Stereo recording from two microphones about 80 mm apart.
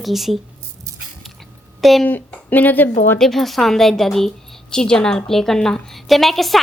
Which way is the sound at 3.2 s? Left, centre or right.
Centre.